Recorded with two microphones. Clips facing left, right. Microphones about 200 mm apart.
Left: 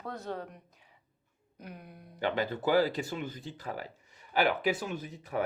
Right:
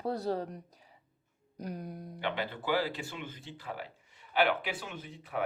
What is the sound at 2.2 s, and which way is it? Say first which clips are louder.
Speech: left 5 dB; 45° left (ahead or behind).